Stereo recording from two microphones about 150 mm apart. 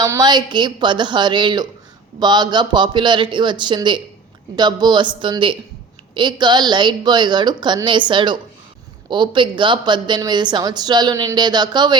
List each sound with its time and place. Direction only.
0.0 s speech: 25° right (ahead or behind)